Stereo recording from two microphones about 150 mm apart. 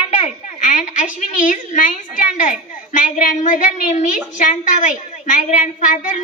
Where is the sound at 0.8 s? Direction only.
55° left (ahead or behind).